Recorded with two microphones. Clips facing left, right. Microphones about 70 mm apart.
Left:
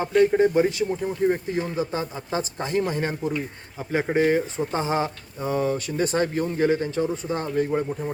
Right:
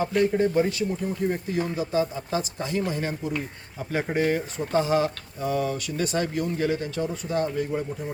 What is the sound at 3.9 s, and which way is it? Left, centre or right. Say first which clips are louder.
Speech: left 4 dB; left.